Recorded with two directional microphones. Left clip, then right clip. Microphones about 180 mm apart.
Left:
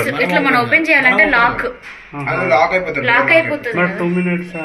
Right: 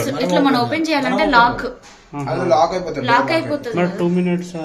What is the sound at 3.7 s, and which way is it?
Speech, 5° right (ahead or behind).